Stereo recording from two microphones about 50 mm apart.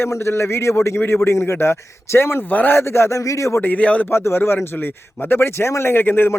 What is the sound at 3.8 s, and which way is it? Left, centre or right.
Speech, left.